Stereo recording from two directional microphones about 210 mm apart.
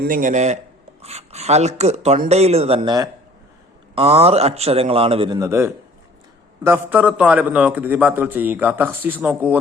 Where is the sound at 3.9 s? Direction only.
30° right (ahead or behind).